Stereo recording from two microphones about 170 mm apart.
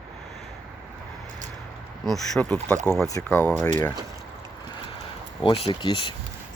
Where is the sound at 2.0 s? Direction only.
Centre (ahead or behind).